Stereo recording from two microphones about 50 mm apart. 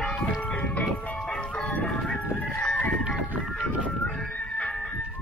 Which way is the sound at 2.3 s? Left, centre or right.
Left.